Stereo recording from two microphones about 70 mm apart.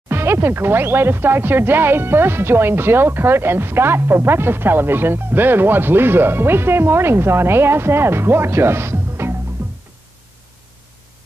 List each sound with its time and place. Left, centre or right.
0.1 s speech: right
9.6 s music: right